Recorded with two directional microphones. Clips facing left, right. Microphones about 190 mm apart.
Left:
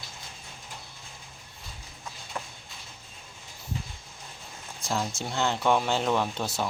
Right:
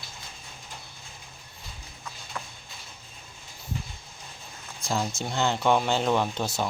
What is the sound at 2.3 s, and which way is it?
Clip-clop, 25° left (ahead or behind).